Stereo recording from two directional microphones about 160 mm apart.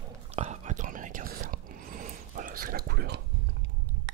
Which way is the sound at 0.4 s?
45° right (ahead or behind).